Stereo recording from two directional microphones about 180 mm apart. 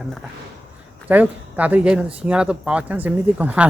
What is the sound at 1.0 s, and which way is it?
A woman's voice, 10° right (ahead or behind).